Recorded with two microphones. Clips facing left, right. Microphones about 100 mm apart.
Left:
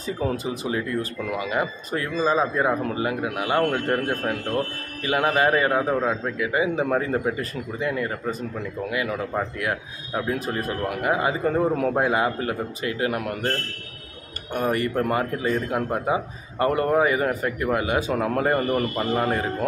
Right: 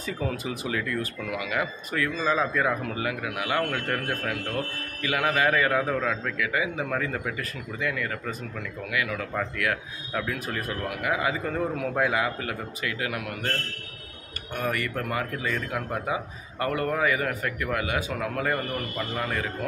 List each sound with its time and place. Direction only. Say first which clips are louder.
0.0 s speech: left 4 dB; 30° left (ahead or behind)